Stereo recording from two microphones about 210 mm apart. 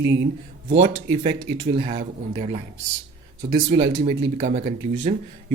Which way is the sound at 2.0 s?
35° right (ahead or behind).